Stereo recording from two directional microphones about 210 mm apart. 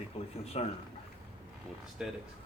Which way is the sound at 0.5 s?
30° left (ahead or behind).